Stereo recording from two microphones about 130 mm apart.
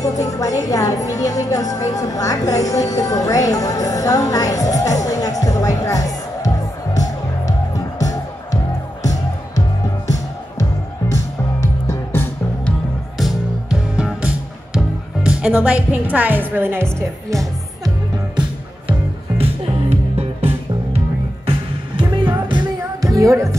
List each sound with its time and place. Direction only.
0.0 s speech: 25° left (ahead or behind)
5.0 s music: 25° left (ahead or behind)
10.6 s music: 25° left (ahead or behind)
13.2 s music: 5° right (ahead or behind)
15.2 s a woman's voice: 10° right (ahead or behind)
16.8 s a woman's voice: centre (ahead or behind)
17.8 s music: 35° right (ahead or behind); by 21.0 s 55° right (ahead or behind)
21.5 s music: 40° right (ahead or behind); by 23.5 s 25° right (ahead or behind)